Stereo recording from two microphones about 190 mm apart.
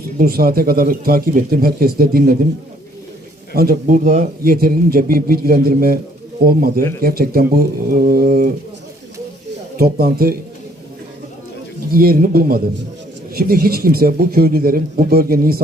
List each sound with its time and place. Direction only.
0.2 s a man's voice: 50° right (ahead or behind)
3.5 s a man's voice: 50° right (ahead or behind)
9.7 s a man's voice: 50° right (ahead or behind)
11.9 s a man's voice: 50° right (ahead or behind)